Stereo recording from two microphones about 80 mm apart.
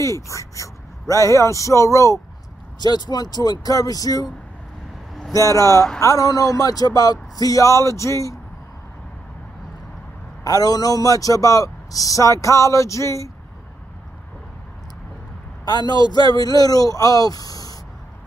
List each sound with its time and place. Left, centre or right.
0.0 s speech: left
2.8 s speech: left
5.9 s a man's voice: left
10.4 s a man's voice: left
15.9 s a man's voice: left